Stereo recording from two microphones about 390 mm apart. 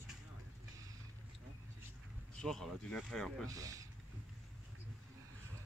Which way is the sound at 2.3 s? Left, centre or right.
Centre.